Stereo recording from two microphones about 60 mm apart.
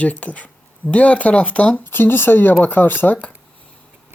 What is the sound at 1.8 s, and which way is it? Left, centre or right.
Speech, left.